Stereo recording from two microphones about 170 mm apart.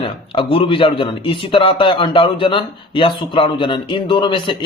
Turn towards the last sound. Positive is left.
turn(degrees=30)  # may be behind; listen again after turning